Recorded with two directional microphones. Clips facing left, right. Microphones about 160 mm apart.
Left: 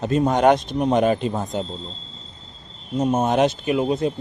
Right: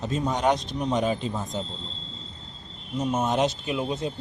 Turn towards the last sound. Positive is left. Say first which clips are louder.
# left 7 dB
turn(degrees=60)  # may be behind; listen again after turning